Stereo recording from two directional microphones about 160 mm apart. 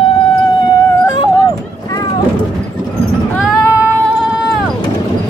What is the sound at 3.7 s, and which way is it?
Cat, 5° right (ahead or behind).